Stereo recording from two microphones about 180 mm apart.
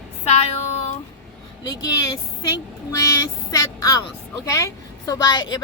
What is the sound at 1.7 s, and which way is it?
A woman's voice, 20° left (ahead or behind).